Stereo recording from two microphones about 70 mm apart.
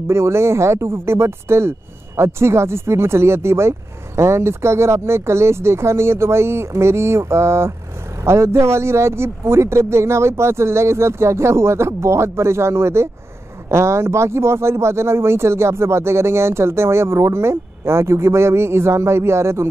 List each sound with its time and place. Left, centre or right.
0.1 s speech: right